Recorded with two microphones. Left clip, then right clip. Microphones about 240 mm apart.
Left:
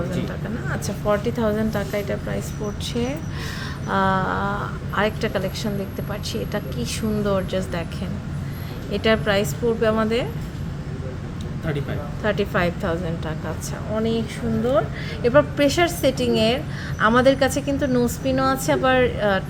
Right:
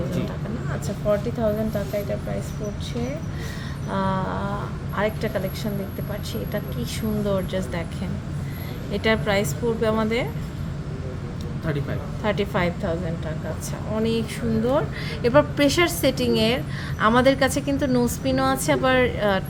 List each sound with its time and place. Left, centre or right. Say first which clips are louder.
1.0 s a woman's voice: left 1 dB; centre
3.8 s speech: left 5 dB; centre
8.9 s a woman's voice: left 2 dB; centre
11.6 s a man's voice: left 1 dB; centre
12.2 s a woman's voice: left 2 dB; centre
13.9 s a man's voice: left 1 dB; centre